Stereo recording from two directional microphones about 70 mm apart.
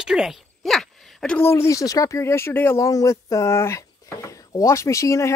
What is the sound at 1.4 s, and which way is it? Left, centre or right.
Speech, left.